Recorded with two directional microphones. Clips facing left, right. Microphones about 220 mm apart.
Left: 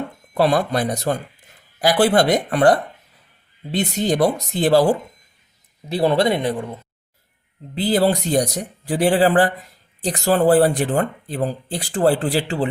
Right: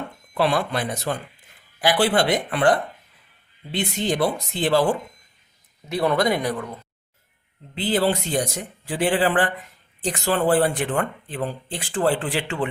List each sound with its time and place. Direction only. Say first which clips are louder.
0.3 s speech: left 4 dB; 40° left (ahead or behind); by 6.7 s 25° left (ahead or behind)
7.8 s speech: left 4 dB; 40° left (ahead or behind)